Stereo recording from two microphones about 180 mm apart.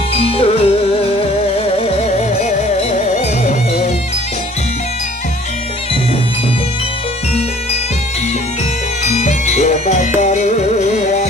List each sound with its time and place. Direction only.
0.1 s music: 30° left (ahead or behind)
9.0 s music: 40° left (ahead or behind)